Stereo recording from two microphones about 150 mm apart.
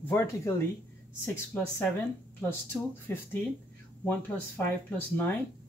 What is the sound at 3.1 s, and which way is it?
Speech, 15° left (ahead or behind).